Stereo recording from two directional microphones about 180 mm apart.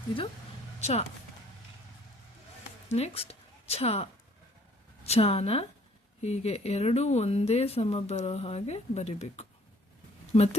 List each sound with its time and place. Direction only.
0.8 s speech: 40° left (ahead or behind)
2.9 s a woman's voice: 35° left (ahead or behind)